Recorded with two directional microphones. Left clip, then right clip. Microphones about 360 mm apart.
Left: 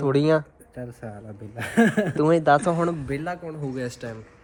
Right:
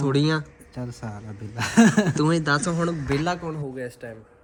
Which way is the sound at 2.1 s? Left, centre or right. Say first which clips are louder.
Left 4 dB; centre.